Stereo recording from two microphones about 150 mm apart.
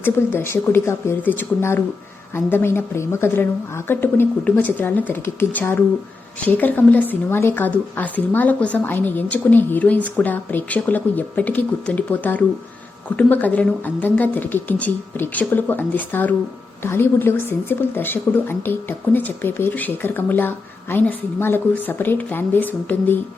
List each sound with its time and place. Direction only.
0.0 s speech: 15° left (ahead or behind)